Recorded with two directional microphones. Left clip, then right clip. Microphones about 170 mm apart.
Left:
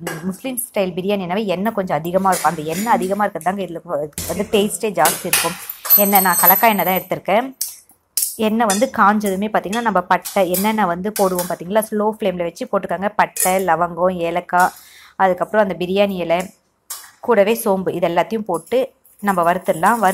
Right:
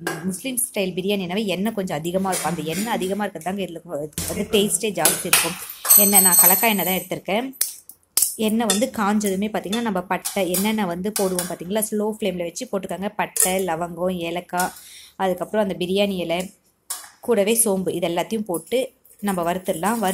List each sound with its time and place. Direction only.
0.0 s speech: centre (ahead or behind)
5.2 s speech: 35° left (ahead or behind)
5.9 s speech: 5° right (ahead or behind)